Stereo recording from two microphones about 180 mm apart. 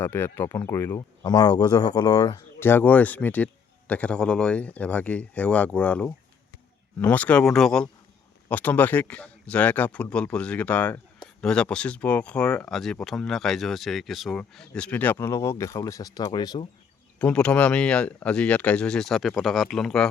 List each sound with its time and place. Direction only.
0.0 s a man's voice: 10° left (ahead or behind)
2.6 s a man's voice: 10° left (ahead or behind)
17.2 s speech: 5° left (ahead or behind)